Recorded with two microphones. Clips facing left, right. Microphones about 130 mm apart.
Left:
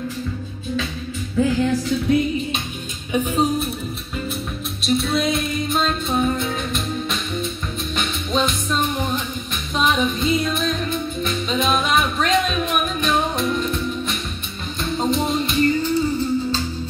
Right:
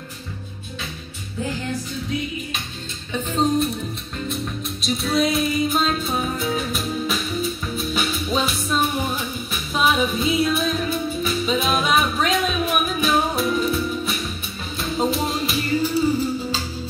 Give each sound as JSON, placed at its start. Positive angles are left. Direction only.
{"t": 3.1, "sound": "music", "side_deg": 10}
{"t": 4.8, "sound": "music", "side_deg": 0}